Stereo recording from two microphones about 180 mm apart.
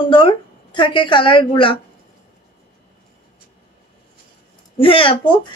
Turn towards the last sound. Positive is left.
turn(degrees=30)  # may be behind; listen again after turning